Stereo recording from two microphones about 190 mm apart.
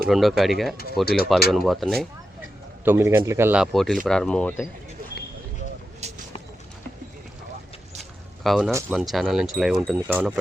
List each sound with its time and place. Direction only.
0.1 s speech: centre (ahead or behind)
1.0 s speech: 55° left (ahead or behind)
1.5 s speech: centre (ahead or behind)
2.8 s speech: 10° right (ahead or behind); by 4.6 s 5° left (ahead or behind)
6.0 s a sound: 35° right (ahead or behind)
8.4 s speech: centre (ahead or behind)